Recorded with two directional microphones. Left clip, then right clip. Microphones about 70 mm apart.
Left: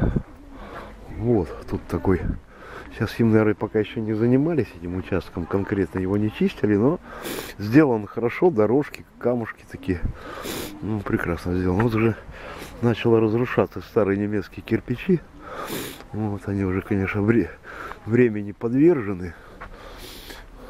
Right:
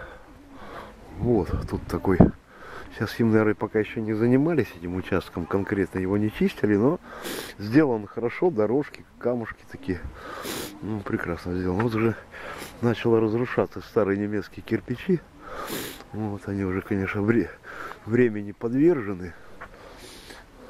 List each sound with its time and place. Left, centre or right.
1.2 s speech: right
7.1 s speech: centre
12.4 s a sound: right
12.8 s speech: centre